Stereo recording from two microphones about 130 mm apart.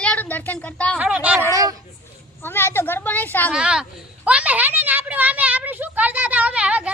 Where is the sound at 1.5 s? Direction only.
30° right (ahead or behind).